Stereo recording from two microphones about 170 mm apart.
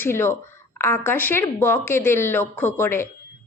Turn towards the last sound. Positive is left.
turn(degrees=15)  # may be behind; listen again after turning